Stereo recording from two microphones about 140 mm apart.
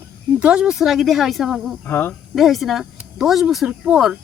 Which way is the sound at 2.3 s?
Centre (ahead or behind).